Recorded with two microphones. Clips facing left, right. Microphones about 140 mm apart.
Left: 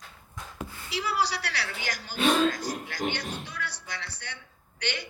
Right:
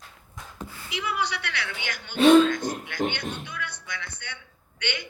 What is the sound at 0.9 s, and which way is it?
A man's voice, 35° left (ahead or behind).